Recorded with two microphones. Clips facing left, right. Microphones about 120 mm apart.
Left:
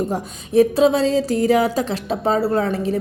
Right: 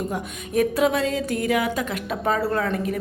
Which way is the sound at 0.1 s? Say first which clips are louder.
Left 6 dB; 30° left (ahead or behind).